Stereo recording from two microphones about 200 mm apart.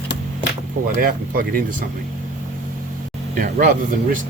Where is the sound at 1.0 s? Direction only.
45° right (ahead or behind).